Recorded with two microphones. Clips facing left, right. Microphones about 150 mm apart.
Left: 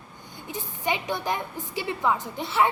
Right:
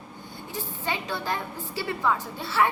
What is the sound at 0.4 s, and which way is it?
A woman's voice, 15° left (ahead or behind).